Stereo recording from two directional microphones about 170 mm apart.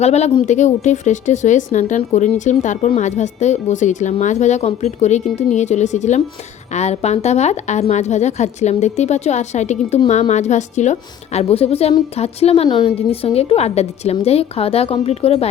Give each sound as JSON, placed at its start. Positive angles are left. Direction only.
{"t": 0.0, "sound": "a woman's voice", "side_deg": 40}